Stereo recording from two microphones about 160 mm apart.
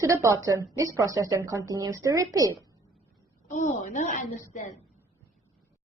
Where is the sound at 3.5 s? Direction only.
50° left (ahead or behind).